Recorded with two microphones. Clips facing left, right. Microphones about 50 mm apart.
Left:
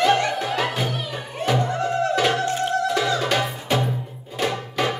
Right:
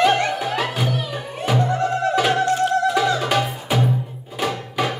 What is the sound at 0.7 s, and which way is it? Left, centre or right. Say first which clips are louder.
Music: right 2 dB; centre.